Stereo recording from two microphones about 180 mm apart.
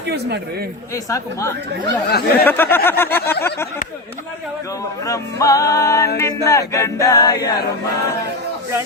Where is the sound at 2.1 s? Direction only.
60° left (ahead or behind).